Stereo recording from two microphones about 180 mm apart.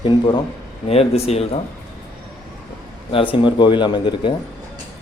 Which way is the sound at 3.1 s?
30° left (ahead or behind).